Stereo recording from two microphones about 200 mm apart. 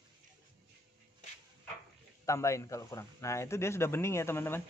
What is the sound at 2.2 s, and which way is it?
Speech, 15° left (ahead or behind).